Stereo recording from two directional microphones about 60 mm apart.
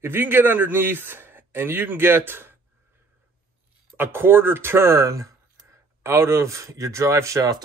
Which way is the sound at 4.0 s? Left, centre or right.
Right.